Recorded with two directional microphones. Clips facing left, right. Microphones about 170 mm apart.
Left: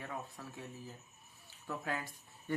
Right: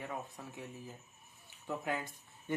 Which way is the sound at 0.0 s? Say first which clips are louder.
Right 2 dB; 20° right (ahead or behind).